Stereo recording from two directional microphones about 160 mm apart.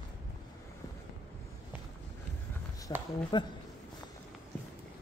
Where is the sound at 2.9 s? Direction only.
25° left (ahead or behind).